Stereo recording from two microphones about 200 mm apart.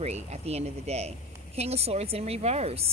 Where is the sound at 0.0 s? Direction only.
35° right (ahead or behind).